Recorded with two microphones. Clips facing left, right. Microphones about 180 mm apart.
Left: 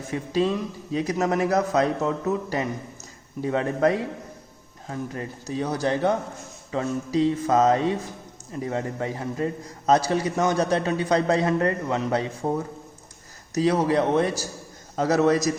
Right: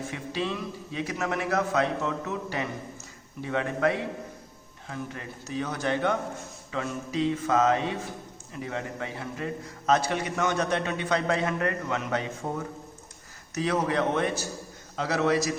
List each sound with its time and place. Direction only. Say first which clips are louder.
0.1 s a man's voice: left 11 dB; 40° left (ahead or behind)